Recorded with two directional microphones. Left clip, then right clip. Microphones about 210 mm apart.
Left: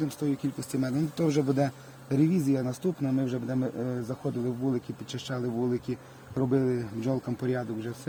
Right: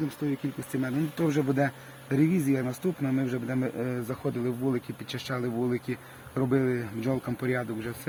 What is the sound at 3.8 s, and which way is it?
Speech, centre (ahead or behind).